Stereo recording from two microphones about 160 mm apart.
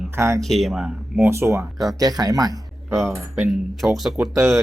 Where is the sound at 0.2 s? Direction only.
15° right (ahead or behind).